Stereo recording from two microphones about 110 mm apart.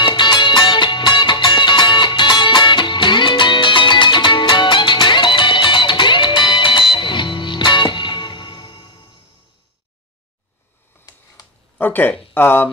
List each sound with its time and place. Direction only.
0.0 s music: 45° left (ahead or behind)
11.8 s a sound: 15° left (ahead or behind)
12.4 s speech: 20° left (ahead or behind)